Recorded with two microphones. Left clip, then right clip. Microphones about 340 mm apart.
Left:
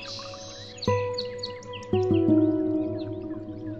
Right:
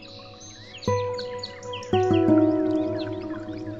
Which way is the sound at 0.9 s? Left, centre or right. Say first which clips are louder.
Right 1 dB; centre.